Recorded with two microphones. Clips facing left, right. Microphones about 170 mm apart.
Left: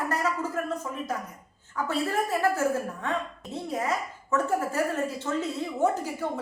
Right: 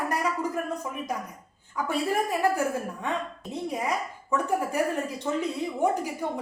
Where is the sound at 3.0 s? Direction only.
15° right (ahead or behind).